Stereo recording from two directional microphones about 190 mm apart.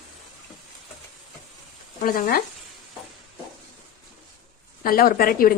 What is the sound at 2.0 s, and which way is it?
Speech, 50° left (ahead or behind).